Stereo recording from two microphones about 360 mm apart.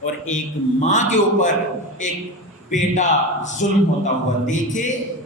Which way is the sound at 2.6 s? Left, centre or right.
Centre.